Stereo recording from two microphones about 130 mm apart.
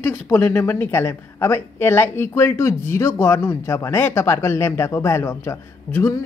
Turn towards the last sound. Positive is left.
turn(degrees=20)  # may be behind; listen again after turning